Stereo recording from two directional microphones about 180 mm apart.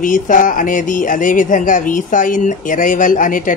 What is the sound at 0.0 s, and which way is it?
Speech, 45° left (ahead or behind).